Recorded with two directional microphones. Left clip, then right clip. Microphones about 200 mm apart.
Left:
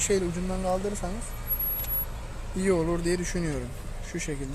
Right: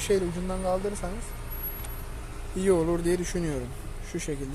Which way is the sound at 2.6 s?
10° right (ahead or behind).